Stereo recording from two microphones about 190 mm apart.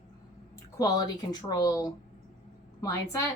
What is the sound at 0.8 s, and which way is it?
A woman's voice, 20° left (ahead or behind).